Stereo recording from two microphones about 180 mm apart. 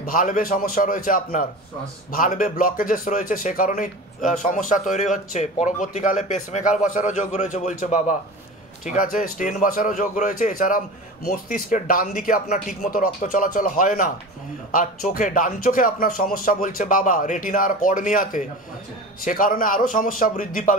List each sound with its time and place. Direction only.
0.0 s a man's voice: 50° left (ahead or behind)